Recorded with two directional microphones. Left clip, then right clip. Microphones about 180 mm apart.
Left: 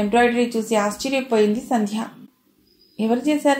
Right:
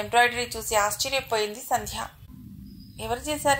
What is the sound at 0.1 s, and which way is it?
A woman's voice, 35° right (ahead or behind).